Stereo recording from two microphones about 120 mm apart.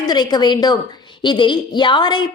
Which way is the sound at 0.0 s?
35° left (ahead or behind).